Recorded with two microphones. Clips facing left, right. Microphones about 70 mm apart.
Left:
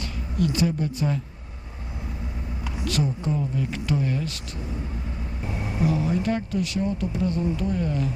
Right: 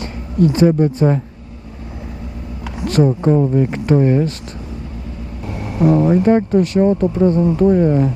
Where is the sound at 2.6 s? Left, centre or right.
Right.